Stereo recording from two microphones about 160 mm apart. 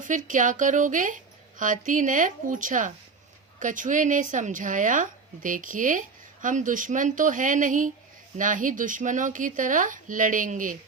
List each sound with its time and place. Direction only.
0.0 s a woman's voice: 55° right (ahead or behind)